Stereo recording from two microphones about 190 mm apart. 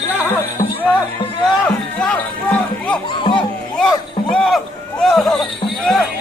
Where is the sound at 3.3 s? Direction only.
5° left (ahead or behind).